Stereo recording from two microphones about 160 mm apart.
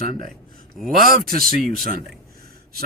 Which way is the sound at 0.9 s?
65° right (ahead or behind).